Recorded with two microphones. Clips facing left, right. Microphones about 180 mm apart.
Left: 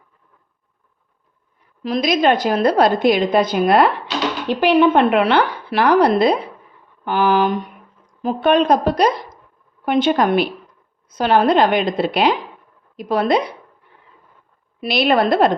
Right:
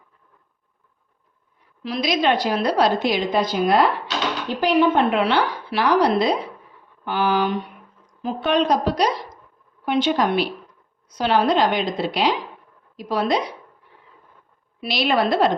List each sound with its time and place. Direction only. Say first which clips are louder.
1.8 s a woman's voice: left 5 dB; 45° left (ahead or behind)
14.8 s a woman's voice: left 4 dB; 55° left (ahead or behind)